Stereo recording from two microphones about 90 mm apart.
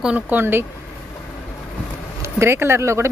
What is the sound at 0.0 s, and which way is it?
Speech, 15° right (ahead or behind).